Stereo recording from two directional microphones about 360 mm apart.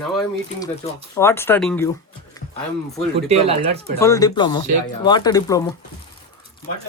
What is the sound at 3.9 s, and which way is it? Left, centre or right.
Speech, centre.